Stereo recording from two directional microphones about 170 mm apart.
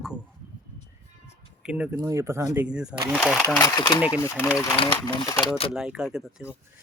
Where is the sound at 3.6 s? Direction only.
20° left (ahead or behind).